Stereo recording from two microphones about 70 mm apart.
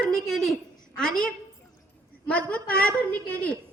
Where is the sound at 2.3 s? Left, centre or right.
Centre.